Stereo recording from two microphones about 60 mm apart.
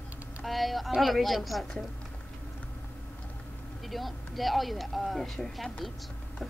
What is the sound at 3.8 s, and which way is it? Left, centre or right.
Speech, centre.